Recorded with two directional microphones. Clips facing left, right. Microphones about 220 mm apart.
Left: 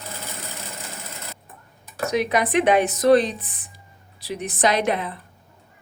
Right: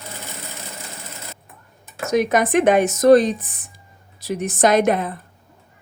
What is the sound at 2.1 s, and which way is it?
A woman's voice, 45° right (ahead or behind).